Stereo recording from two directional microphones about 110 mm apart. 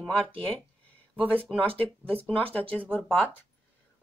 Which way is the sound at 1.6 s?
55° right (ahead or behind).